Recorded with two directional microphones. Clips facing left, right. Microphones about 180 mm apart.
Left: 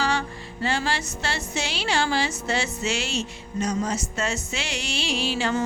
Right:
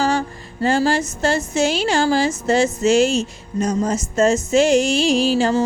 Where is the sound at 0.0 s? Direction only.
45° right (ahead or behind).